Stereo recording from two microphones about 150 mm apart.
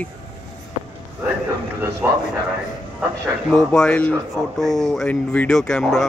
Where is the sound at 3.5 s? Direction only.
5° left (ahead or behind).